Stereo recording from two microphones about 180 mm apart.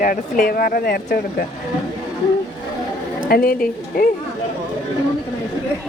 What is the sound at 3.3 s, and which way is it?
Speech, 55° left (ahead or behind).